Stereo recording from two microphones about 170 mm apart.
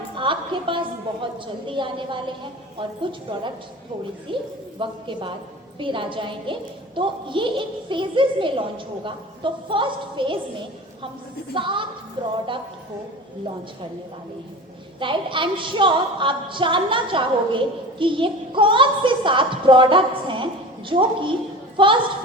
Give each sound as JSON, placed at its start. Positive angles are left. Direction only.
{"t": 0.2, "sound": "a woman's voice", "side_deg": -30}
{"t": 11.5, "sound": "a woman's voice", "side_deg": -30}
{"t": 14.9, "sound": "a woman's voice", "side_deg": -30}